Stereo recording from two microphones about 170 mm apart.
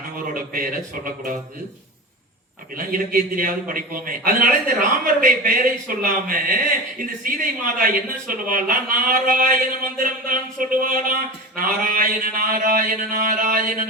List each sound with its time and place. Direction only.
0.3 s speech: 55° right (ahead or behind)
2.7 s speech: 55° right (ahead or behind)